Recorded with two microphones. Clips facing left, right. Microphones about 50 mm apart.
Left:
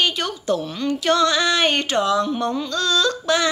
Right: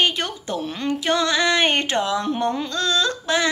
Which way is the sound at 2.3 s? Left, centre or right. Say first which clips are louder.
Even; right.